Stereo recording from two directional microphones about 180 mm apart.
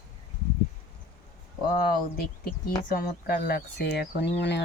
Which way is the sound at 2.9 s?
55° left (ahead or behind).